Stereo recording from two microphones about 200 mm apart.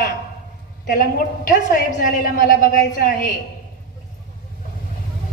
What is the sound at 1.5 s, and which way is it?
A woman's voice, 40° left (ahead or behind).